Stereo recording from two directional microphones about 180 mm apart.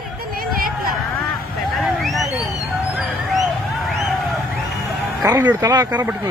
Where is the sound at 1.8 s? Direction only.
Centre (ahead or behind).